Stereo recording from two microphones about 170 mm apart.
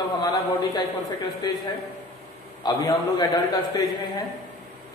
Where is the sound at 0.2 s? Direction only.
20° left (ahead or behind).